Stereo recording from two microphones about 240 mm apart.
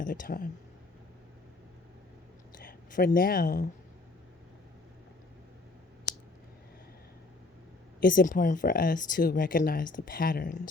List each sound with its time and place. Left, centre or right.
0.0 s speech: left
2.6 s speech: left
8.0 s speech: left